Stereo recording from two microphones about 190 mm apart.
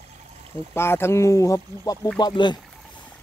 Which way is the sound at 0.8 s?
15° left (ahead or behind).